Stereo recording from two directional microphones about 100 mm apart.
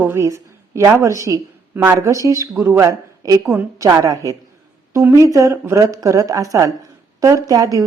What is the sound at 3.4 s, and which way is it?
Speech, 20° right (ahead or behind).